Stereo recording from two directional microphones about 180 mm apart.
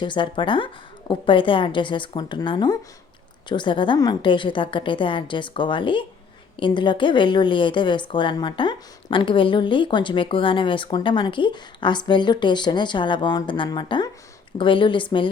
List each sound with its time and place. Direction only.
0.0 s a woman's voice: 25° left (ahead or behind)